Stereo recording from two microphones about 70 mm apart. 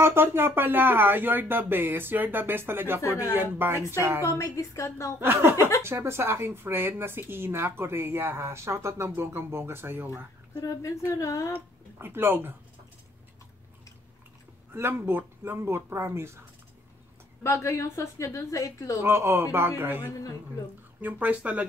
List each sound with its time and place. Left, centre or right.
0.0 s speech: right
4.3 s a woman's voice: left
5.2 s speech: right
10.5 s a woman's voice: left
12.0 s speech: right
14.7 s speech: right
17.4 s a woman's voice: left
19.0 s speech: right
21.0 s speech: right